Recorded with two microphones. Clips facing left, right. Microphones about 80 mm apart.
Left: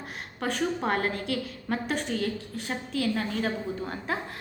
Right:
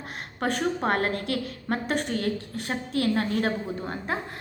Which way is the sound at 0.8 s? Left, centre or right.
Right.